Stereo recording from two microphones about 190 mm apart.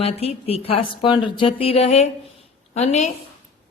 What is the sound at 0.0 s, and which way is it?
A woman's voice, 30° left (ahead or behind).